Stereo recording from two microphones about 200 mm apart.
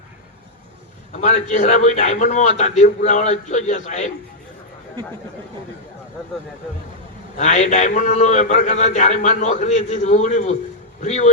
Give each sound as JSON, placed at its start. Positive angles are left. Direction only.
{"t": 1.2, "sound": "a man's voice", "side_deg": 35}
{"t": 7.3, "sound": "a man's voice", "side_deg": 35}